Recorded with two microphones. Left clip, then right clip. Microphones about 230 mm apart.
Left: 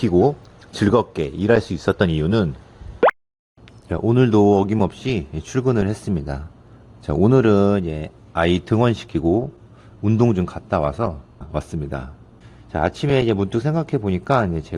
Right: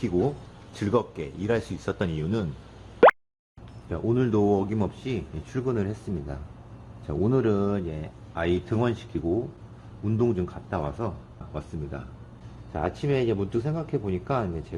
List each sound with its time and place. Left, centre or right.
0.8 s speech: left
3.0 s plop: centre
3.8 s speech: left